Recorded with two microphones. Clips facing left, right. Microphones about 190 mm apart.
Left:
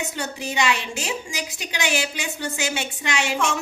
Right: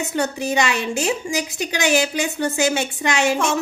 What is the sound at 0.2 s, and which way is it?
A woman's voice, 45° right (ahead or behind).